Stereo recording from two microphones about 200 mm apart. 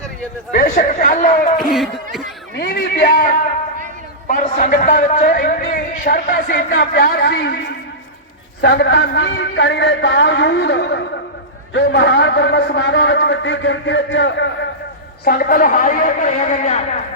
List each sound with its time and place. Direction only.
0.5 s a man's voice: 45° left (ahead or behind)
1.5 s speech: centre (ahead or behind)
2.6 s a man's voice: 50° left (ahead or behind)
8.6 s a man's voice: 60° left (ahead or behind)
15.2 s a man's voice: 50° left (ahead or behind)